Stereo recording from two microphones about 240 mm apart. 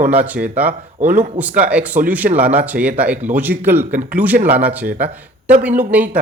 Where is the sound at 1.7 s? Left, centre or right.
Centre.